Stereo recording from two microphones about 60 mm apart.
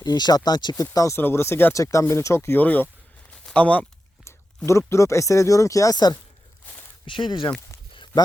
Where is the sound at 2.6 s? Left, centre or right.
Left.